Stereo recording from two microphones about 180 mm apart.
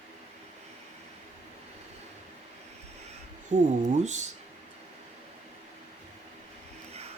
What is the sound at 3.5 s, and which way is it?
Speech, 40° right (ahead or behind).